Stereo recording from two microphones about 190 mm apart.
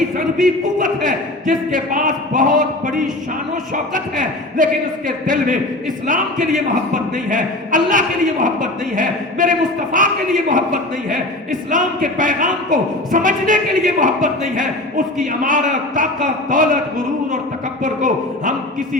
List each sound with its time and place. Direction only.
0.4 s speech: 45° right (ahead or behind)
3.9 s speech: 45° right (ahead or behind)
17.8 s speech: 45° right (ahead or behind)